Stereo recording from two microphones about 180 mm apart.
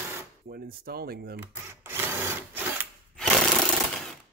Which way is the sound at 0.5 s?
60° right (ahead or behind).